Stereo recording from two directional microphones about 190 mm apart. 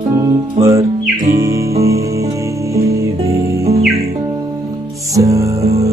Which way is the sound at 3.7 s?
35° right (ahead or behind).